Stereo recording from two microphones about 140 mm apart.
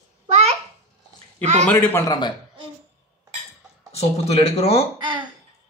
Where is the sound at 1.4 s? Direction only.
55° right (ahead or behind).